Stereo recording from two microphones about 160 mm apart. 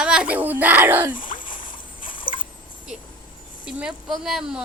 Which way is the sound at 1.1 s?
60° left (ahead or behind).